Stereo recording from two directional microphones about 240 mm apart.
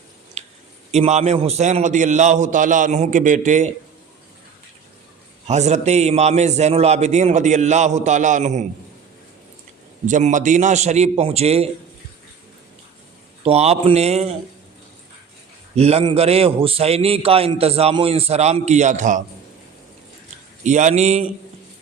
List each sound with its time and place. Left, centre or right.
0.4 s a sound: right
0.9 s a man's voice: right
5.5 s a man's voice: right
10.1 s a man's voice: right
13.4 s a man's voice: right
15.7 s a man's voice: right
20.7 s a man's voice: right